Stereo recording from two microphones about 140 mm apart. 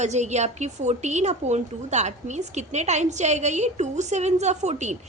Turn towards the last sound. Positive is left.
turn(degrees=-55)  # may be behind; listen again after turning